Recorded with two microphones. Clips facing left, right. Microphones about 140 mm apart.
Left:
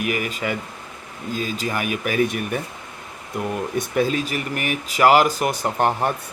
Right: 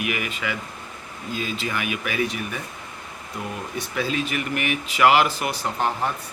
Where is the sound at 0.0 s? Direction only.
40° left (ahead or behind).